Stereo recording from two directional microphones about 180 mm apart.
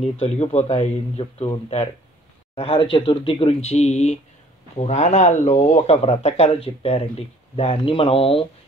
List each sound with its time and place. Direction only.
0.0 s speech: 35° left (ahead or behind)